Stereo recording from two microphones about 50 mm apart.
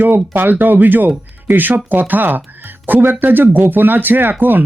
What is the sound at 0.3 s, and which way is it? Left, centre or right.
Speech, right.